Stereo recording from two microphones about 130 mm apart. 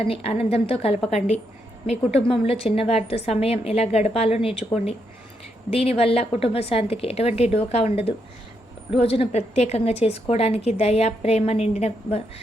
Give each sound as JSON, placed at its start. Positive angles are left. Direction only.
{"t": 0.0, "sound": "a woman's voice", "side_deg": 50}
{"t": 5.7, "sound": "a woman's voice", "side_deg": 50}